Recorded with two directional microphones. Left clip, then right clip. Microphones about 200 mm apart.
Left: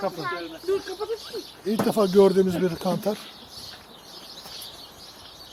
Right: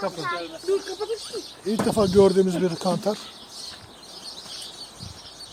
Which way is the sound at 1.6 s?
Centre (ahead or behind).